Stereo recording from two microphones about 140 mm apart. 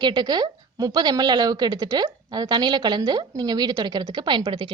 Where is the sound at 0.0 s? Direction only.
30° right (ahead or behind).